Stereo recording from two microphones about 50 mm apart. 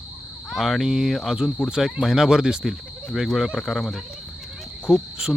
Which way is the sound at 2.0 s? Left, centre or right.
Centre.